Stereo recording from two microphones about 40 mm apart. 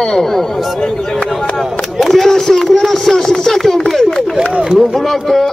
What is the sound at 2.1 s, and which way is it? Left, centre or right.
Speech, centre.